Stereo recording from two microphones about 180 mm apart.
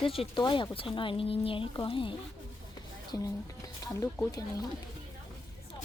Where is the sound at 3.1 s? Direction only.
20° left (ahead or behind).